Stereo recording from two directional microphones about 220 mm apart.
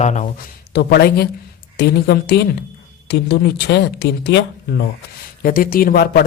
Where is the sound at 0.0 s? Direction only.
30° left (ahead or behind).